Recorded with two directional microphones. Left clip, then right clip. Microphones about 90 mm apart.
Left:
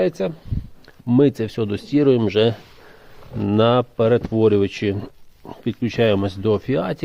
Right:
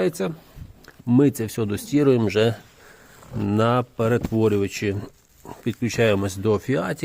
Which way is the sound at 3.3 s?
40° left (ahead or behind).